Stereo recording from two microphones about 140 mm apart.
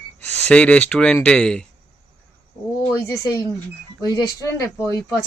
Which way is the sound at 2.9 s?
20° left (ahead or behind).